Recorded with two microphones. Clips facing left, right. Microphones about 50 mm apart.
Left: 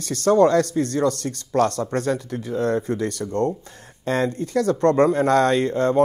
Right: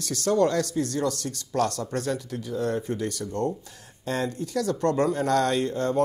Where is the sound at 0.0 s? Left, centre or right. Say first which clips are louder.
Left 6 dB; left.